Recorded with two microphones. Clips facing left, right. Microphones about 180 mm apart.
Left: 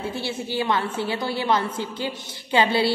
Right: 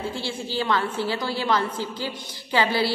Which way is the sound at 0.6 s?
20° left (ahead or behind).